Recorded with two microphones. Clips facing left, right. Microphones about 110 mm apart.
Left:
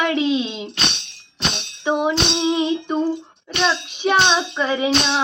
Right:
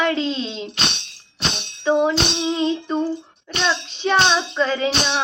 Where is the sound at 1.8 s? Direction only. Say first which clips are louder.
Right 2 dB; 15° left (ahead or behind).